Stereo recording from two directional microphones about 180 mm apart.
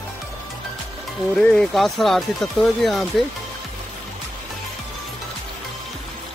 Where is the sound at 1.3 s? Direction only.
5° left (ahead or behind).